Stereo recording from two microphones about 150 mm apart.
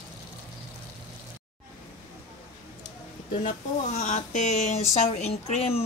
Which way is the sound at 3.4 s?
55° left (ahead or behind).